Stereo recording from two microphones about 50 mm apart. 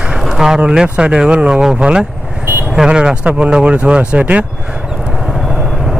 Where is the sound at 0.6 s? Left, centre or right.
Centre.